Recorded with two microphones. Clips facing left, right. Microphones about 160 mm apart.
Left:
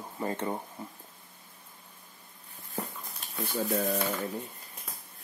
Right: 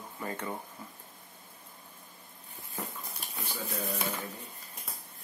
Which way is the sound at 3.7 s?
50° left (ahead or behind).